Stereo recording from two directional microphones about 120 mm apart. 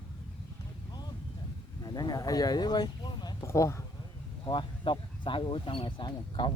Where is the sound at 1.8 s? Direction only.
35° left (ahead or behind).